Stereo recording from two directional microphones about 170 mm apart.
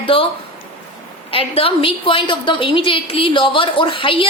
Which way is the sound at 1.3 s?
35° left (ahead or behind).